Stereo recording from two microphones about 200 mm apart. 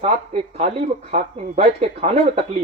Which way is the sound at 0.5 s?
35° right (ahead or behind).